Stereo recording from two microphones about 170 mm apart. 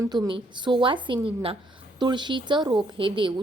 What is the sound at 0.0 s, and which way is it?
A woman's voice, 25° right (ahead or behind).